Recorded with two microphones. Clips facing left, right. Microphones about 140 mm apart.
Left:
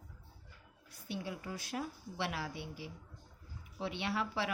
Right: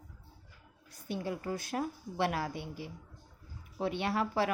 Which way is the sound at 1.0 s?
45° right (ahead or behind).